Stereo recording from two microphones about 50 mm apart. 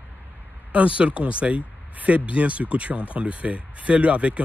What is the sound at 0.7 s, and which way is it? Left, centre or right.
Speech, right.